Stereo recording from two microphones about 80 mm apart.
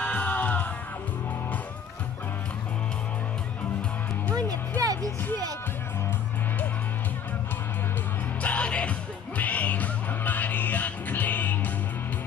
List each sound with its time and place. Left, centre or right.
0.0 s music: left
4.4 s music: right
8.4 s music: centre